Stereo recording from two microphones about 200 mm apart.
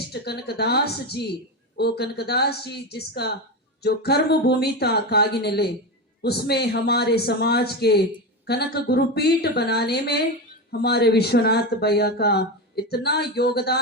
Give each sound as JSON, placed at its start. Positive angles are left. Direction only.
{"t": 0.1, "sound": "speech", "side_deg": 55}